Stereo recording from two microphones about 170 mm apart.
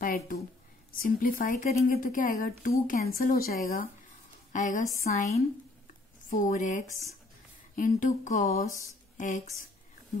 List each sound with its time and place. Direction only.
0.0 s a sound: 55° left (ahead or behind)
0.9 s speech: 55° left (ahead or behind)
4.5 s speech: 50° left (ahead or behind)